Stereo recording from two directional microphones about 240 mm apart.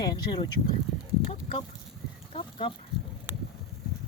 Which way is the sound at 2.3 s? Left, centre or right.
Left.